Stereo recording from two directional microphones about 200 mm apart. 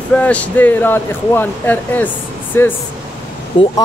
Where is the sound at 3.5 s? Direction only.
25° left (ahead or behind).